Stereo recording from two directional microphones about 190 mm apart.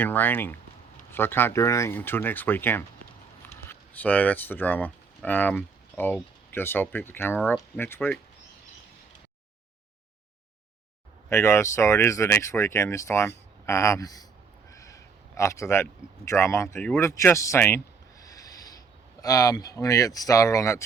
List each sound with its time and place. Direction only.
0.0 s speech: 10° left (ahead or behind)
11.3 s speech: 15° left (ahead or behind)
18.2 s a sound: 20° left (ahead or behind)
19.2 s speech: 20° left (ahead or behind)